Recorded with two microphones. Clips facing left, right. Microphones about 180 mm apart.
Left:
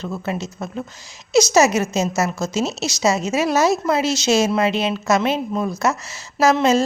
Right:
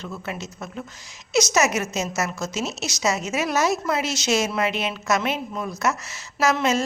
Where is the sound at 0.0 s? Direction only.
30° left (ahead or behind).